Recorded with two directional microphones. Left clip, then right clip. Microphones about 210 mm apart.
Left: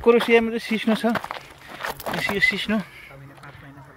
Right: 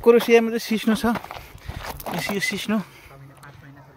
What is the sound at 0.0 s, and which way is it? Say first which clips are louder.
Speech: right 1 dB; 20° right (ahead or behind).